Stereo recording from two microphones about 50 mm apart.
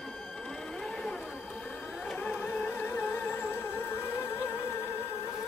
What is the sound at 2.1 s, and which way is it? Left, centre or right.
Music, left.